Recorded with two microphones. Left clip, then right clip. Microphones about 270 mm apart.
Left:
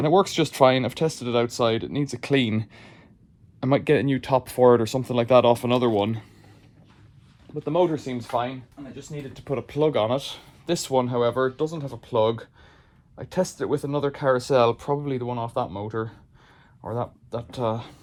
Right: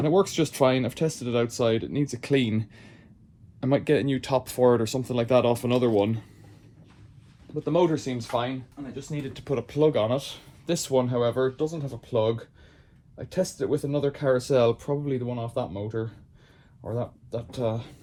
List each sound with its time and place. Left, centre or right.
0.0 s speech: left
7.5 s speech: left